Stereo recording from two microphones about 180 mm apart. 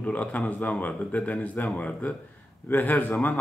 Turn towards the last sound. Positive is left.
turn(degrees=10)  # may be behind; listen again after turning